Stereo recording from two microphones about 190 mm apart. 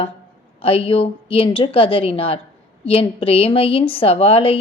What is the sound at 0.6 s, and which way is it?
A woman's voice, 30° left (ahead or behind).